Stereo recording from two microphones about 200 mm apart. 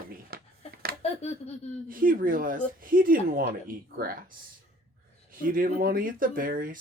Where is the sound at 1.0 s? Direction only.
30° left (ahead or behind).